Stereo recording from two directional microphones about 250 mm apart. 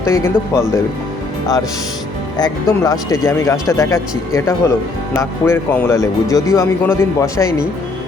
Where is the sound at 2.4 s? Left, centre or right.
Centre.